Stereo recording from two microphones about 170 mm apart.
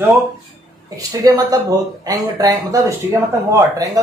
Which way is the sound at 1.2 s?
20° right (ahead or behind).